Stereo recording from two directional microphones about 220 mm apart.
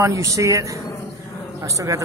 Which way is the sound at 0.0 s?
15° right (ahead or behind).